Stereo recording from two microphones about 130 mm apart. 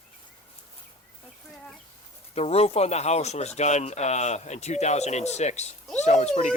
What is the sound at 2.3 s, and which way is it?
Speech, 50° left (ahead or behind).